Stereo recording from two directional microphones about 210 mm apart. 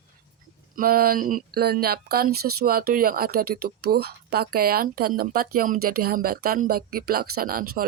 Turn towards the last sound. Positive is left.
turn(degrees=-45)  # may be behind; listen again after turning